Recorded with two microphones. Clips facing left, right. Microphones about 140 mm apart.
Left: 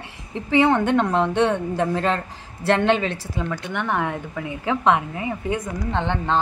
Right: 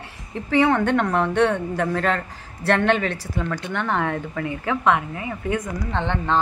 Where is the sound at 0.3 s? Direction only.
20° left (ahead or behind).